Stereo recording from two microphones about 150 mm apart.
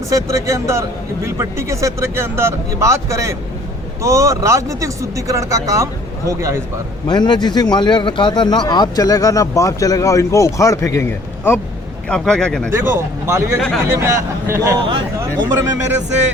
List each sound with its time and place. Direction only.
0.1 s speech: 20° right (ahead or behind)
7.1 s speech: 30° left (ahead or behind); by 12.7 s 5° left (ahead or behind)
12.7 s speech: 15° right (ahead or behind)
13.6 s speech: 5° left (ahead or behind)
13.9 s speech: 20° right (ahead or behind)
14.8 s speech: 35° right (ahead or behind)